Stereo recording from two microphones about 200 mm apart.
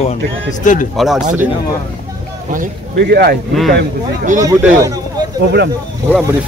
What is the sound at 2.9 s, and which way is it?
Speech, 55° right (ahead or behind).